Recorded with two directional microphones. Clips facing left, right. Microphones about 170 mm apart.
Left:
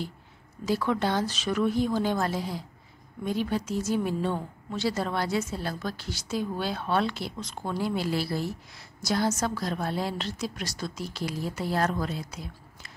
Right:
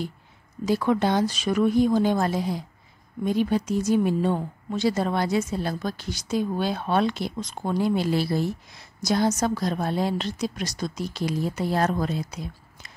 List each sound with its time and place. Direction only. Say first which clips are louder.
0.7 s a woman's voice: right 4 dB; 15° right (ahead or behind)